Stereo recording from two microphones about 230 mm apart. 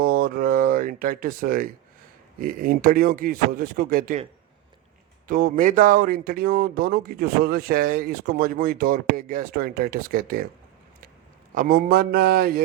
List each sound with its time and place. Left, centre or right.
0.0 s a sound: right
2.4 s speech: right
5.3 s speech: right
11.5 s speech: right